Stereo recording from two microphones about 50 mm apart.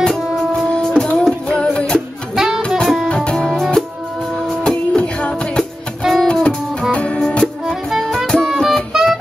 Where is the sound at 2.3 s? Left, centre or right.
Centre.